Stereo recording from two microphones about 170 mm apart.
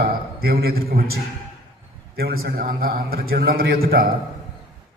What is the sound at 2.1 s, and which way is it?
A man's voice, 65° right (ahead or behind).